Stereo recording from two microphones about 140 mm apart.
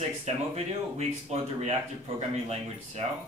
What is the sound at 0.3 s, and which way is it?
Speech, 50° right (ahead or behind).